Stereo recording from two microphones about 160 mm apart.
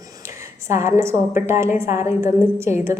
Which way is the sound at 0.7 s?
15° right (ahead or behind).